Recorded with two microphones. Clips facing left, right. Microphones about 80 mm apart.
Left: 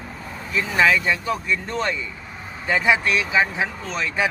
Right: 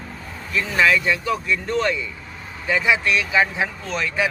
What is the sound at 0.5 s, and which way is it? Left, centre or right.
Speech, left.